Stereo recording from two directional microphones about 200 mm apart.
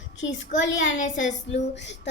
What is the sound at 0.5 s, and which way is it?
Speech, 40° left (ahead or behind).